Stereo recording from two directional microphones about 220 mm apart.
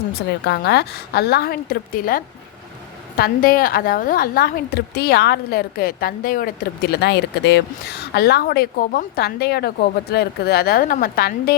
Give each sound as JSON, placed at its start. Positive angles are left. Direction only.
{"t": 0.2, "sound": "a woman's voice", "side_deg": 45}